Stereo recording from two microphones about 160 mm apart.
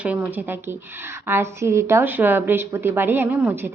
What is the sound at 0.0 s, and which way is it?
Speech, 10° right (ahead or behind).